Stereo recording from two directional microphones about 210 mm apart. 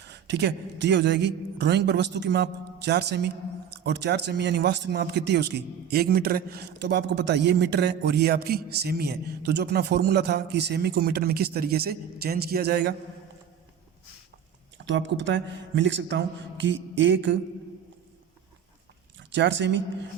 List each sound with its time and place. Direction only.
0.0 s a man's voice: 55° right (ahead or behind)
14.8 s a man's voice: 60° right (ahead or behind)
19.3 s a man's voice: 60° right (ahead or behind)